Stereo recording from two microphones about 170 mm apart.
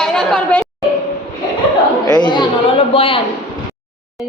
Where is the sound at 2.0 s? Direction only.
25° left (ahead or behind).